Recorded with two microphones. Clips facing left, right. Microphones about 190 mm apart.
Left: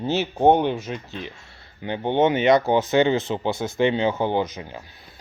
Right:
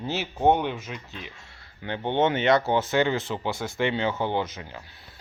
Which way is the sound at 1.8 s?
15° left (ahead or behind).